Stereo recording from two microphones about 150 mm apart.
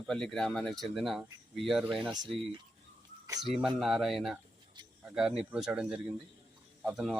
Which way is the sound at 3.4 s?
Centre (ahead or behind).